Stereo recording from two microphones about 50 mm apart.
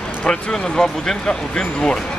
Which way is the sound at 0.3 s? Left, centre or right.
Centre.